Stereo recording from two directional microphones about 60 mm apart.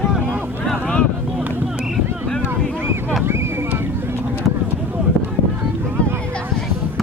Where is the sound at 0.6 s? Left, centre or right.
Centre.